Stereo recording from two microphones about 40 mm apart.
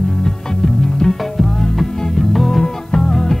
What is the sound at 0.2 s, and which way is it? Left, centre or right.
Music, centre.